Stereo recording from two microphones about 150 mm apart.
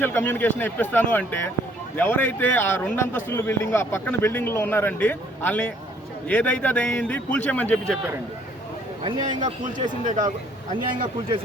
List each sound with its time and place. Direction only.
0.0 s a man's voice: 15° left (ahead or behind)
9.2 s a man's voice: 55° right (ahead or behind)